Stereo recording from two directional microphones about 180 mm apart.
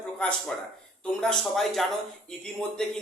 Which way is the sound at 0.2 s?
5° left (ahead or behind).